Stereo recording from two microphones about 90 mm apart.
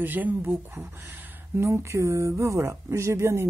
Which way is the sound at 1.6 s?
30° right (ahead or behind).